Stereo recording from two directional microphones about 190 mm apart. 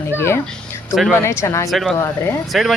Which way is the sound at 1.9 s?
15° left (ahead or behind).